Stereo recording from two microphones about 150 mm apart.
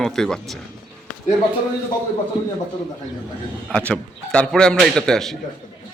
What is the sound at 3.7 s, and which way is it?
A man's voice, 10° left (ahead or behind).